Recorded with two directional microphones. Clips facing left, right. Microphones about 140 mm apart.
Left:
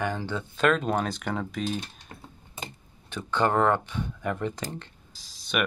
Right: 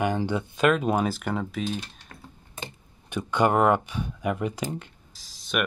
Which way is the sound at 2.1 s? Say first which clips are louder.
Left 1 dB; 25° left (ahead or behind).